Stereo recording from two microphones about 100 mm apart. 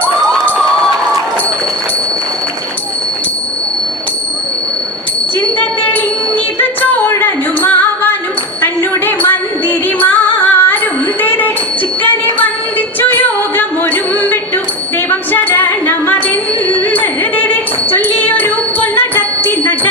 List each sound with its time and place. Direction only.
5.5 s music: 20° left (ahead or behind)
11.2 s a sound: 20° left (ahead or behind)
13.0 s music: 20° left (ahead or behind)